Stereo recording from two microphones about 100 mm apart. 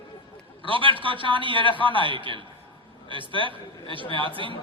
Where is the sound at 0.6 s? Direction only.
60° right (ahead or behind).